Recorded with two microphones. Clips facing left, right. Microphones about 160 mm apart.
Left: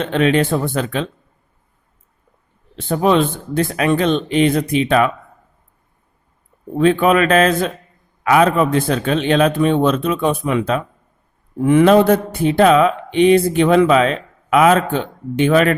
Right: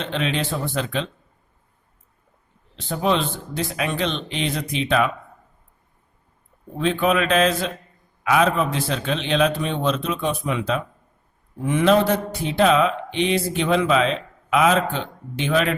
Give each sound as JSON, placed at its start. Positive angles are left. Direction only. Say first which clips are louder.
{"t": 0.0, "sound": "speech", "louder": "left 9 dB", "side_deg": 50}
{"t": 2.7, "sound": "speech", "louder": "left 7 dB", "side_deg": 55}
{"t": 6.7, "sound": "speech", "louder": "left 7 dB", "side_deg": 50}